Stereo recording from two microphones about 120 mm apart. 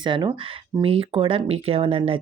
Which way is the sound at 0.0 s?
40° right (ahead or behind).